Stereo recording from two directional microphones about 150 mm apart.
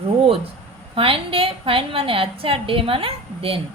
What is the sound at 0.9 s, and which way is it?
A woman's voice, 35° right (ahead or behind).